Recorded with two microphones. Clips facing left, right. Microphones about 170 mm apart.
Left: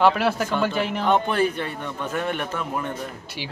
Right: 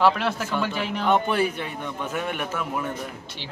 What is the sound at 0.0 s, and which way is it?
A man's voice, 10° left (ahead or behind).